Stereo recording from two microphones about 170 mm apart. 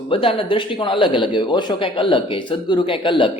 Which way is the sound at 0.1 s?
30° left (ahead or behind).